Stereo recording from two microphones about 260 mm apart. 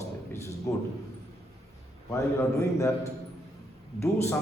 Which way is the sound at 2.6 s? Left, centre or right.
Centre.